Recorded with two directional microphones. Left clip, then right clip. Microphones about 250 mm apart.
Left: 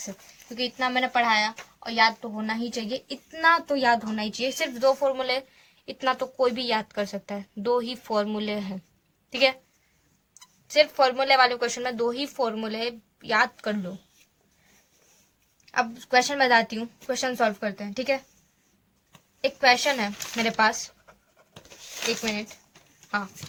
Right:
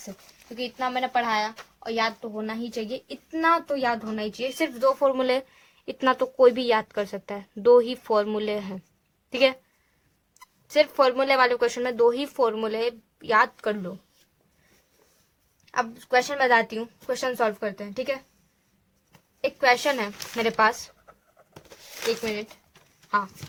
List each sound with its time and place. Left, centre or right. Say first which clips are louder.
0.5 s speech: left 2 dB; right
15.6 s speech: left 1 dB; right
19.4 s speech: left 1 dB; right